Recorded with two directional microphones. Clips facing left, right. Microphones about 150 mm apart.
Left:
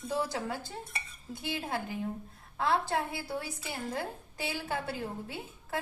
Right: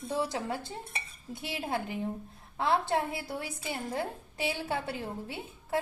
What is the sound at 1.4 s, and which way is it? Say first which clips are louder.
A woman's voice: right 1 dB; 20° right (ahead or behind).